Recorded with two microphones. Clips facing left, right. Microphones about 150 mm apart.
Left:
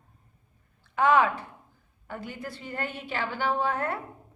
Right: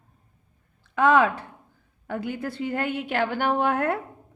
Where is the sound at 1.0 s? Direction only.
80° right.